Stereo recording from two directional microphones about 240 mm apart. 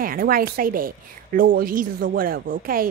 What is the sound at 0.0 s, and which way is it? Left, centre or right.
A woman's voice, right.